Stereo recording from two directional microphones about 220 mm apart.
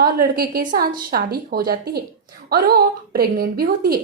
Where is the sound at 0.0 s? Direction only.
45° right (ahead or behind).